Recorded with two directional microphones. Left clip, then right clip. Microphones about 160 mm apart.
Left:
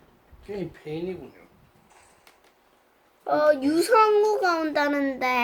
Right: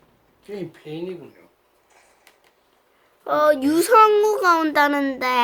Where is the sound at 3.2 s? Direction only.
40° right (ahead or behind).